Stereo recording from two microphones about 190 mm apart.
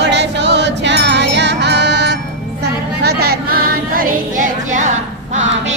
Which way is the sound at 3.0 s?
55° right (ahead or behind).